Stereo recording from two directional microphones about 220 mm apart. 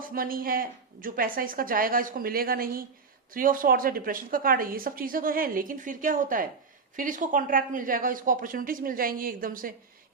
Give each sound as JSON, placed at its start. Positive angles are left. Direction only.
{"t": 0.1, "sound": "a woman's voice", "side_deg": -40}